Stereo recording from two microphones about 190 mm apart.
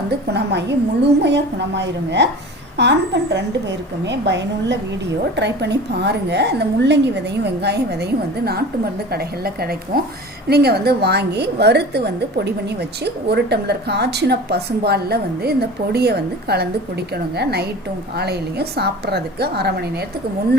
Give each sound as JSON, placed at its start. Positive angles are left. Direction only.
{"t": 0.3, "sound": "a woman's voice", "side_deg": -65}